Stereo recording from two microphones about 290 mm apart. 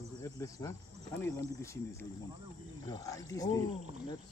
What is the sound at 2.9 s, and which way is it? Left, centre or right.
Speech, centre.